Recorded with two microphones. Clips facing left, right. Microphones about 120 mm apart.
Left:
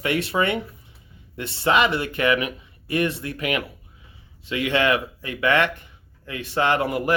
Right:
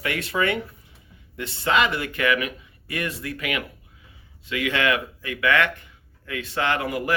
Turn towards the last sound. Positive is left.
turn(degrees=30)  # may be behind; listen again after turning